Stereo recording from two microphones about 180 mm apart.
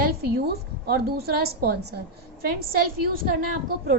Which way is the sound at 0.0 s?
60° right (ahead or behind).